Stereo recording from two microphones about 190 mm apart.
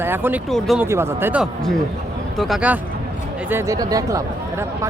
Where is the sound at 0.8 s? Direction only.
10° right (ahead or behind).